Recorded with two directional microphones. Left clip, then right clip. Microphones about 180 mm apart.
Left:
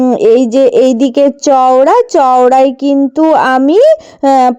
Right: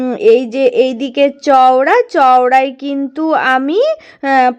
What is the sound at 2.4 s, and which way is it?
Speech, 40° left (ahead or behind).